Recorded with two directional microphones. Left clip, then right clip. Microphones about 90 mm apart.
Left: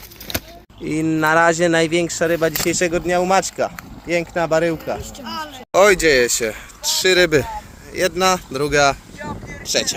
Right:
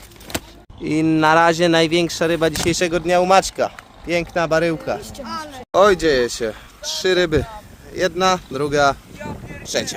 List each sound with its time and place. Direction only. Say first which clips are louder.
0.9 s speech: right 2 dB; 30° right (ahead or behind)
5.2 s speech: left 1 dB; 55° right (ahead or behind)
5.7 s speech: left 1 dB; 10° right (ahead or behind)
9.6 s speech: left 3 dB; 30° right (ahead or behind)